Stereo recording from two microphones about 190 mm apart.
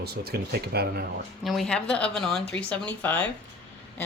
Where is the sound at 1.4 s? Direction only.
Centre (ahead or behind).